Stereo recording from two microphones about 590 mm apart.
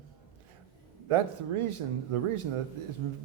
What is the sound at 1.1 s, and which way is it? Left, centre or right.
Speech, right.